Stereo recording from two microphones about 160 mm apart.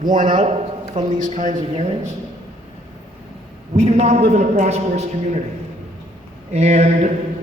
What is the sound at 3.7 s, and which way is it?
A man's voice, 40° right (ahead or behind).